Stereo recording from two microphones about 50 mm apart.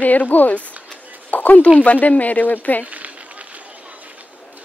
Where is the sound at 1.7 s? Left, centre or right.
Left.